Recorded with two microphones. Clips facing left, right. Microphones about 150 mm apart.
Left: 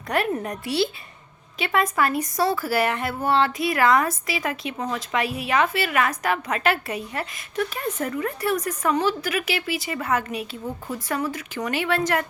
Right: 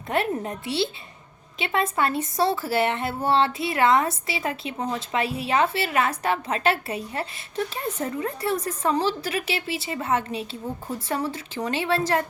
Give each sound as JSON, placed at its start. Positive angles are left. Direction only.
{"t": 0.1, "sound": "speech", "side_deg": -25}